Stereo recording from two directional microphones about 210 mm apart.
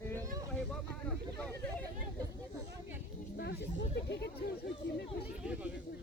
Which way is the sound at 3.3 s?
55° left (ahead or behind).